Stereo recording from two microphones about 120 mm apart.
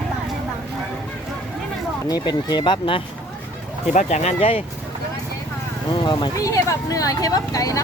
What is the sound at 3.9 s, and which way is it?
Speech, 75° left (ahead or behind).